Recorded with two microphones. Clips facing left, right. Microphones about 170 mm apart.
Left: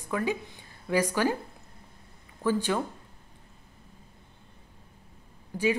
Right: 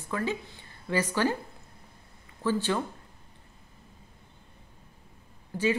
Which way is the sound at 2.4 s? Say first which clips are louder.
Left 1 dB; 10° left (ahead or behind).